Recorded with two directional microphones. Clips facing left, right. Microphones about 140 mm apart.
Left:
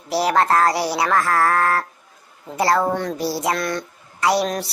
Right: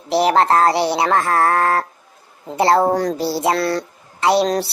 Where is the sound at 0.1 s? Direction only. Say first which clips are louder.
Right 3 dB; 25° right (ahead or behind).